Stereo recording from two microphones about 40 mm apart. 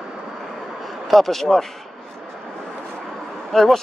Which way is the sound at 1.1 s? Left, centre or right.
Centre.